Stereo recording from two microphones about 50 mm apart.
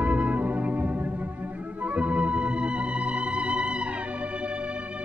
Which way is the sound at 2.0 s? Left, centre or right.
Right.